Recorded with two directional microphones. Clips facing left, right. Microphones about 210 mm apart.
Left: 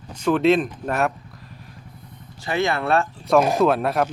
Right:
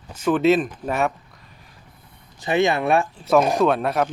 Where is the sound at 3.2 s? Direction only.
Centre (ahead or behind).